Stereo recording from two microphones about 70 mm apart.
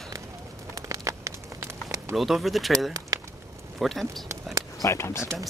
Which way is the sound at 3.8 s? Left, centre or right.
Centre.